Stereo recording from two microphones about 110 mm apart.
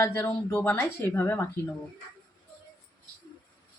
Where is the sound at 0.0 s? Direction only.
25° left (ahead or behind).